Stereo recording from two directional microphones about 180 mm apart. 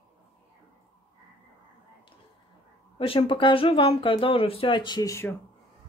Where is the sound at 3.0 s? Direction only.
30° left (ahead or behind); by 5.3 s 15° left (ahead or behind).